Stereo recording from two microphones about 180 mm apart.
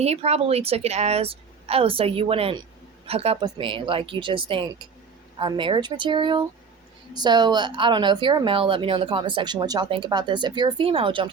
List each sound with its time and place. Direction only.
0.0 s a woman's voice: 35° right (ahead or behind)